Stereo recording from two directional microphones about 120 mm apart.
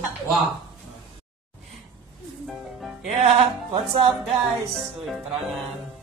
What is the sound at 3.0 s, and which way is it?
Music, 65° right (ahead or behind).